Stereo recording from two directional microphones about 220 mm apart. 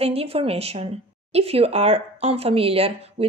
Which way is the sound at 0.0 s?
25° right (ahead or behind).